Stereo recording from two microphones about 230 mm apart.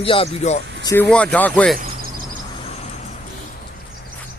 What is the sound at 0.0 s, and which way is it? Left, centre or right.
Speech, left.